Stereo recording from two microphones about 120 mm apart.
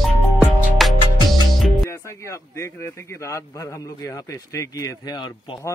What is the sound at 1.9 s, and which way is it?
A man's voice, 25° left (ahead or behind).